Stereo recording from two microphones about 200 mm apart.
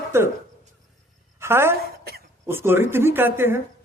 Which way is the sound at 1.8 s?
50° right (ahead or behind).